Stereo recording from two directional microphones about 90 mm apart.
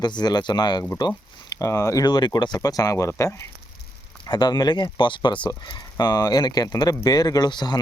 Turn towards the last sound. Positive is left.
turn(degrees=55)  # may be behind; listen again after turning